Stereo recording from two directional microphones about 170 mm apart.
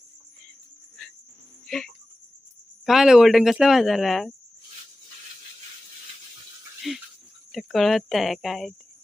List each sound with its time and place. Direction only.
1.6 s cricket: centre (ahead or behind)
2.8 s speech: centre (ahead or behind)
6.9 s speech: centre (ahead or behind)